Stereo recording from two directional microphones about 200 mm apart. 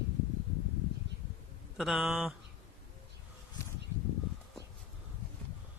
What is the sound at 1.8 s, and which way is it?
Speech, centre (ahead or behind).